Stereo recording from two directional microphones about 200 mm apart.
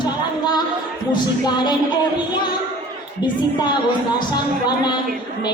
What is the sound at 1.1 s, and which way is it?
Speech, 20° left (ahead or behind).